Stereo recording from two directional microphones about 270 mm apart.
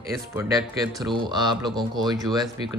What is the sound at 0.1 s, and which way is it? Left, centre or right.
Speech, centre.